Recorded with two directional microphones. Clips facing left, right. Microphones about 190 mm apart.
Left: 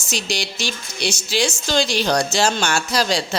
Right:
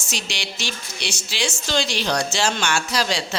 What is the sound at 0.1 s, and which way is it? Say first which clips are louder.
A woman's voice: left 6 dB; 40° left (ahead or behind).